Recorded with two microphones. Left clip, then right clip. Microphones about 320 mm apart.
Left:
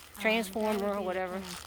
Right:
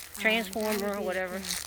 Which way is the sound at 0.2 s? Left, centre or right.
Centre.